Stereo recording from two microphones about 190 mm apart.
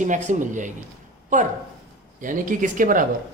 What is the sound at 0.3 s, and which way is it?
Speech, 40° right (ahead or behind).